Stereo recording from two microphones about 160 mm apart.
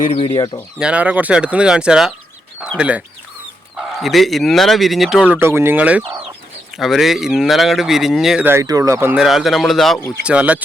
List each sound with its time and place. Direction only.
0.2 s speech: 30° left (ahead or behind)
0.8 s speech: 5° right (ahead or behind)
8.4 s speech: 20° right (ahead or behind)
9.2 s speech: centre (ahead or behind)